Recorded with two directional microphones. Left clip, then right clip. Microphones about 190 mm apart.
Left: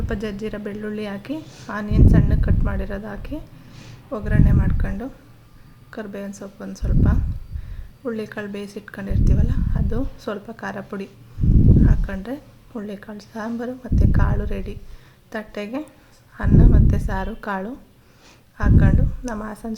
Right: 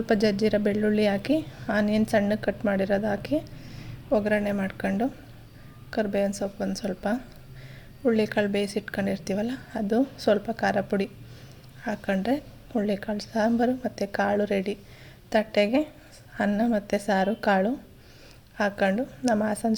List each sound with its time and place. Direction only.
0.0 s a woman's voice: 30° right (ahead or behind)